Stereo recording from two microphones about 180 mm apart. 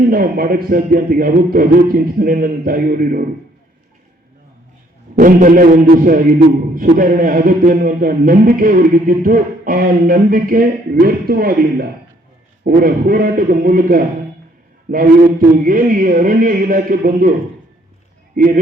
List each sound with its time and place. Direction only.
0.1 s a man's voice: 55° right (ahead or behind)
5.1 s a man's voice: 50° right (ahead or behind)
18.4 s a man's voice: 50° right (ahead or behind)